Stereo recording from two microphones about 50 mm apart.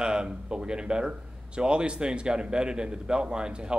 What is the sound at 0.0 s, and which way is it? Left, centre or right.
A man's voice, centre.